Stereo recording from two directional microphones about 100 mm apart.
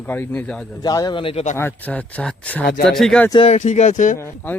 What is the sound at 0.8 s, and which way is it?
Speech, 40° left (ahead or behind).